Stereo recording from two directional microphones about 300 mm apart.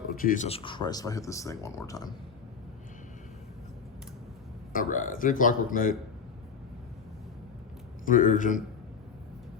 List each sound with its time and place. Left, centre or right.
0.2 s speech: left; by 2.0 s centre
4.7 s speech: left
8.0 s speech: left